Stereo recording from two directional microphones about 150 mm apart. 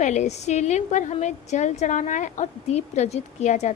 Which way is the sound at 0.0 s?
50° left (ahead or behind).